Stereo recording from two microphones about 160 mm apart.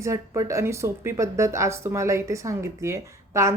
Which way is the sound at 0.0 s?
20° right (ahead or behind).